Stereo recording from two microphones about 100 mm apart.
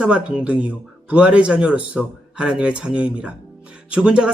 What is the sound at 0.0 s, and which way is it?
Speech, 10° right (ahead or behind).